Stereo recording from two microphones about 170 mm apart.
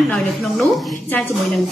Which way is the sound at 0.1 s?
Centre (ahead or behind).